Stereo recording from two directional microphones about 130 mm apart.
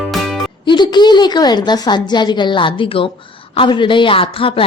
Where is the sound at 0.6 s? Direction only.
35° left (ahead or behind).